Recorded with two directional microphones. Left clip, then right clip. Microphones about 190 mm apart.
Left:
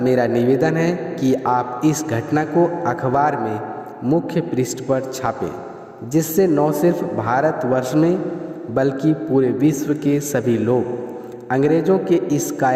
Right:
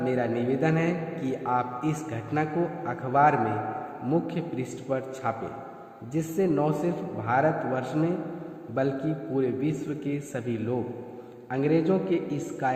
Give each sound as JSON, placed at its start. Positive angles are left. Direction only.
{"t": 0.0, "sound": "a man's voice", "side_deg": 50}